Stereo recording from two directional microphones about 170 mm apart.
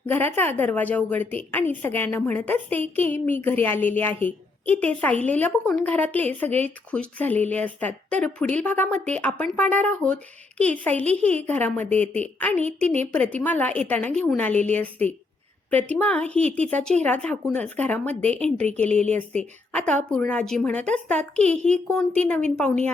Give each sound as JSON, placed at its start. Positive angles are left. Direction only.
{"t": 0.0, "sound": "speech", "side_deg": 10}
{"t": 12.5, "sound": "a woman's voice", "side_deg": -40}
{"t": 13.1, "sound": "speech", "side_deg": 10}